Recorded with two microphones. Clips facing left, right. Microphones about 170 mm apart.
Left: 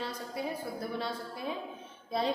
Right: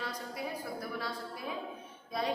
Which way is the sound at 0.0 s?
25° left (ahead or behind).